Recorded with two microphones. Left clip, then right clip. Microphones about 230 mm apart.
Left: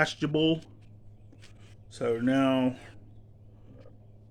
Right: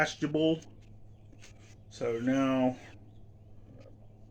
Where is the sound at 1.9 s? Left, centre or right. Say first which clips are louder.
Left 3 dB; left.